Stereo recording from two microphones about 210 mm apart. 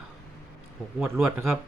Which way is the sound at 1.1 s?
10° right (ahead or behind).